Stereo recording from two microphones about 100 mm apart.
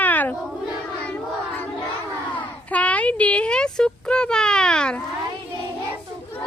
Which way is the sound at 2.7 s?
15° left (ahead or behind).